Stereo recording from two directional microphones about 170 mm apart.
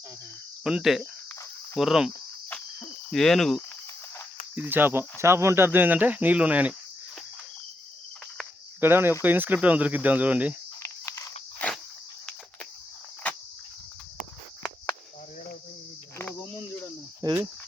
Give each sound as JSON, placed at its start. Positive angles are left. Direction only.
{"t": 0.6, "sound": "cricket", "side_deg": -5}
{"t": 4.5, "sound": "speech", "side_deg": -10}
{"t": 8.8, "sound": "speech", "side_deg": -10}
{"t": 10.8, "sound": "a sound", "side_deg": 15}
{"t": 16.1, "sound": "cricket", "side_deg": 15}
{"t": 17.2, "sound": "cricket", "side_deg": -15}